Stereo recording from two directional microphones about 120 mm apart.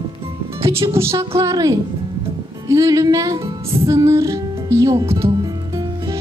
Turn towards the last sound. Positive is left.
turn(degrees=-20)  # may be behind; listen again after turning